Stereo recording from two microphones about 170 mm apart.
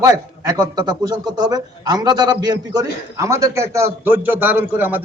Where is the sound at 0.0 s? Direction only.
25° right (ahead or behind).